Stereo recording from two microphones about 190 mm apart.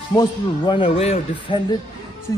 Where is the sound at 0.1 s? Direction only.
25° left (ahead or behind).